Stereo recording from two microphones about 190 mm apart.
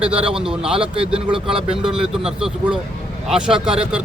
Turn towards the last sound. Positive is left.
turn(degrees=-5)  # may be behind; listen again after turning